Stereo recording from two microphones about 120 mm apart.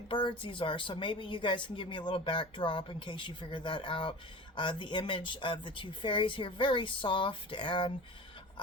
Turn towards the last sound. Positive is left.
turn(degrees=40)  # may be behind; listen again after turning